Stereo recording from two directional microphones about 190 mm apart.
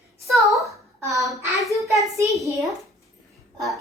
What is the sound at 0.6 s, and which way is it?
Speech, 15° right (ahead or behind).